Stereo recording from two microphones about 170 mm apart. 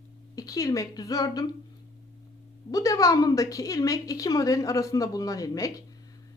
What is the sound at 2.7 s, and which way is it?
A woman's voice, 20° left (ahead or behind).